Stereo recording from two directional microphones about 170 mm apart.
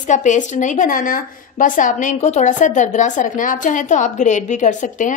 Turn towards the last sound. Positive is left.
turn(degrees=50)  # may be behind; listen again after turning